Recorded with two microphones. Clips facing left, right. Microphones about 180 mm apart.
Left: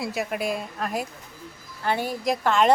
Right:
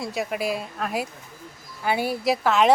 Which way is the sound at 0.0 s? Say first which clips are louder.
Even; centre (ahead or behind).